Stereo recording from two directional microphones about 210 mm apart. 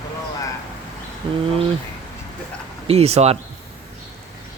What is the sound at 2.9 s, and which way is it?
Speech, 30° right (ahead or behind).